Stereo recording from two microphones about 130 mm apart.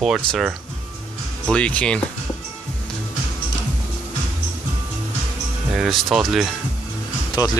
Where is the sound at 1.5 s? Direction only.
10° left (ahead or behind).